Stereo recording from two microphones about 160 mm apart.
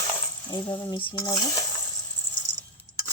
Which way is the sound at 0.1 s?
15° left (ahead or behind).